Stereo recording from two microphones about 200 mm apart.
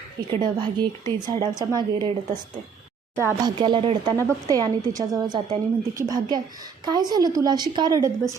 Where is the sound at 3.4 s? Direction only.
20° right (ahead or behind).